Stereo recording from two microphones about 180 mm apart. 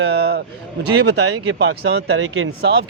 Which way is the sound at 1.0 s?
65° right (ahead or behind).